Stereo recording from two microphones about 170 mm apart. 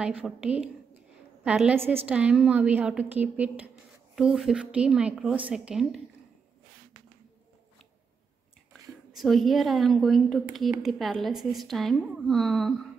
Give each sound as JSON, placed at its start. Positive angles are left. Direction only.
{"t": 0.0, "sound": "a woman's voice", "side_deg": -5}
{"t": 9.1, "sound": "a woman's voice", "side_deg": 0}